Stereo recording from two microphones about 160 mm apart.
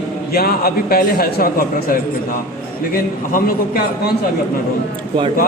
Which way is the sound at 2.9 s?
65° left (ahead or behind).